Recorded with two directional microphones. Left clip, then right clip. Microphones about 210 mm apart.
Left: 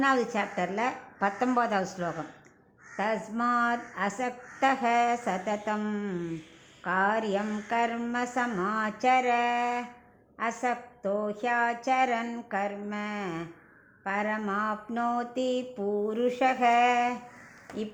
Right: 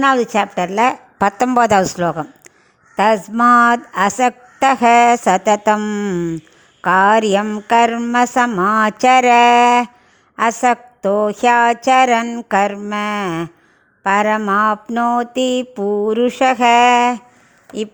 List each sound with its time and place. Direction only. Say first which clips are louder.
0.0 s a woman's voice: right 12 dB; 50° right (ahead or behind)
6.8 s a woman's voice: right 15 dB; 55° right (ahead or behind)